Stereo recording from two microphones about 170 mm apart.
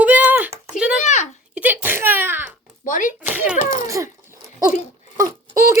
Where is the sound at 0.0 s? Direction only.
10° right (ahead or behind).